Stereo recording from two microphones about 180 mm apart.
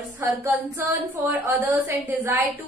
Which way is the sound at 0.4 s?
15° right (ahead or behind).